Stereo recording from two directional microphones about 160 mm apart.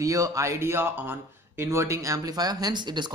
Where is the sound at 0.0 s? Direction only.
20° right (ahead or behind).